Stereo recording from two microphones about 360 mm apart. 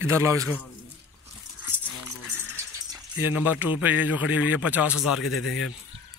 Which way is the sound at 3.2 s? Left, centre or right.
Centre.